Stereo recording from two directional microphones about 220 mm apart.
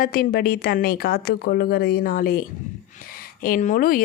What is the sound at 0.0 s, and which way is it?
A woman's voice, 40° left (ahead or behind).